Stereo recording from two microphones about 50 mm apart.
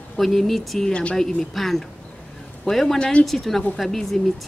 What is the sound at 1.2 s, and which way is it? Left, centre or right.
Speech, centre.